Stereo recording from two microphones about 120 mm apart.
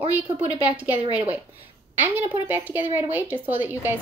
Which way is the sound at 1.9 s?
15° right (ahead or behind).